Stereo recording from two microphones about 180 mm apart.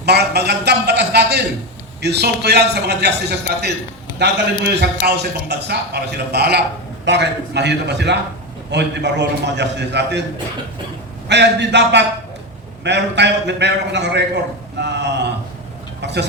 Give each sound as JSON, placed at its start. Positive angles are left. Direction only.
{"t": 0.0, "sound": "a man's voice", "side_deg": -65}
{"t": 11.3, "sound": "a man's voice", "side_deg": -70}